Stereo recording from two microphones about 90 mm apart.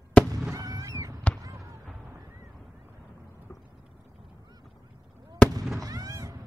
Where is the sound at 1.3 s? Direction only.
40° right (ahead or behind).